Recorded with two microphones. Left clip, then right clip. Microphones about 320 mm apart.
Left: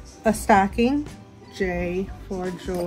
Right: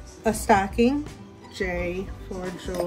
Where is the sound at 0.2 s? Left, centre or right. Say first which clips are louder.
Left 3 dB; centre.